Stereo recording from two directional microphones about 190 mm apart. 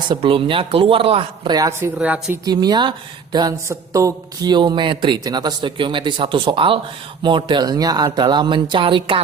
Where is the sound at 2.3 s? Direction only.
20° right (ahead or behind).